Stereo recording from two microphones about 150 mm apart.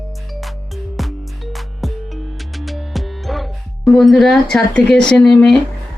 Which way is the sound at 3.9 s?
Centre (ahead or behind).